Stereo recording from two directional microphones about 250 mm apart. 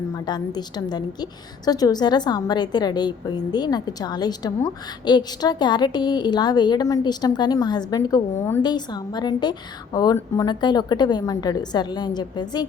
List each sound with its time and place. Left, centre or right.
0.1 s a woman's voice: centre